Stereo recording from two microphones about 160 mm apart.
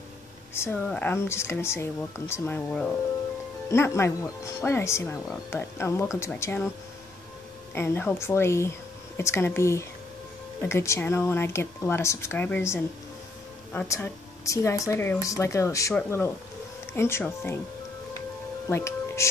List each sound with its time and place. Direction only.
0.6 s speech: 10° left (ahead or behind)
7.7 s speech: 15° left (ahead or behind)
18.7 s speech: 15° left (ahead or behind)